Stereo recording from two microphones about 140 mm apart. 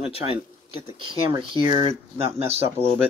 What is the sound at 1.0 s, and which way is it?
Speech, 35° right (ahead or behind).